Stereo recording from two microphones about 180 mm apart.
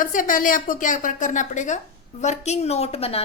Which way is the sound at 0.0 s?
50° left (ahead or behind).